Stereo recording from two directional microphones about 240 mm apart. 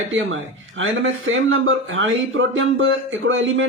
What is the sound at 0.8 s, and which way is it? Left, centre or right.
Speech, right.